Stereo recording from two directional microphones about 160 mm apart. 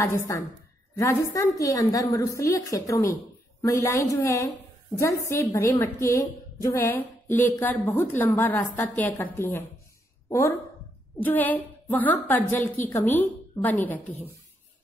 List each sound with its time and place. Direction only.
0.0 s a woman's voice: 20° left (ahead or behind)
11.1 s a woman's voice: 10° left (ahead or behind)